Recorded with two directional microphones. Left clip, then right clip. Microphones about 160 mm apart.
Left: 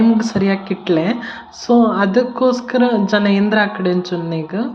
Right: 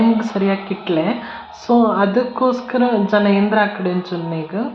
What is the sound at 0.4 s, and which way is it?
Music, 25° left (ahead or behind).